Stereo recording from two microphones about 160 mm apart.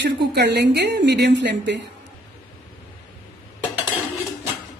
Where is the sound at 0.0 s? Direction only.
90° right.